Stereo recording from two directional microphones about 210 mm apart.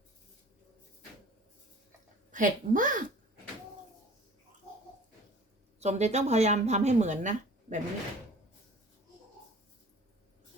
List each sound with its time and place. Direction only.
2.3 s speech: 40° right (ahead or behind)
5.8 s speech: 30° right (ahead or behind)